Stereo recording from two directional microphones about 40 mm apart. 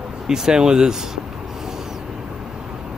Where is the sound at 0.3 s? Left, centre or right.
Centre.